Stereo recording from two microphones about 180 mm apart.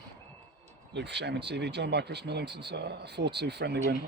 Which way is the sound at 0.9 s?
70° right (ahead or behind).